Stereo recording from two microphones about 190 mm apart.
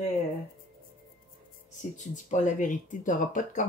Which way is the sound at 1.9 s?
40° left (ahead or behind).